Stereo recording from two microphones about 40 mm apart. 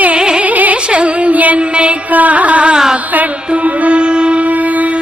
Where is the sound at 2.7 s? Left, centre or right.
Centre.